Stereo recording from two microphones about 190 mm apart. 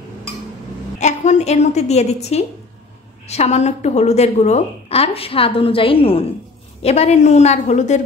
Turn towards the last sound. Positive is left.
turn(degrees=40)  # may be behind; listen again after turning